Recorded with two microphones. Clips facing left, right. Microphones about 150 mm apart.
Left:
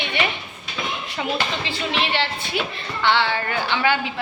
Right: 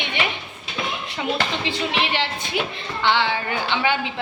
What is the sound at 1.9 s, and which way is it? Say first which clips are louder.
Speech: even; 15° right (ahead or behind).